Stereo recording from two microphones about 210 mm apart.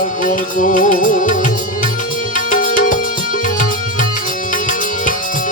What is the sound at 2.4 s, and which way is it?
Music, 40° left (ahead or behind).